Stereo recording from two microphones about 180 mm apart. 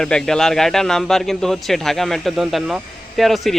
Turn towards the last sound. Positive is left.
turn(degrees=0)  # may be behind; listen again after turning